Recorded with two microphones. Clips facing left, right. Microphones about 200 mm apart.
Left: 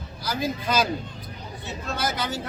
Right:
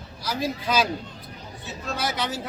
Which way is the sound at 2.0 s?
Centre (ahead or behind).